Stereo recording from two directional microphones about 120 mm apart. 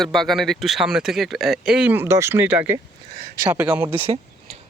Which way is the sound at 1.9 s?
20° right (ahead or behind).